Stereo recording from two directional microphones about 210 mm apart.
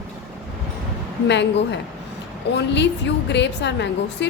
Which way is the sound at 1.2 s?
55° left (ahead or behind).